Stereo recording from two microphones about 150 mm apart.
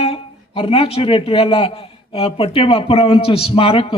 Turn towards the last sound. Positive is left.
turn(degrees=40)  # may be behind; listen again after turning